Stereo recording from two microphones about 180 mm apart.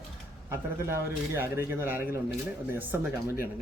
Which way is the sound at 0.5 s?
15° right (ahead or behind).